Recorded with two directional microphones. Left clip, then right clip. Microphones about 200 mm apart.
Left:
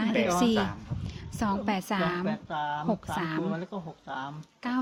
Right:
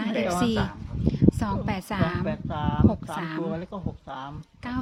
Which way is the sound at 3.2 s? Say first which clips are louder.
Even; 5° left (ahead or behind).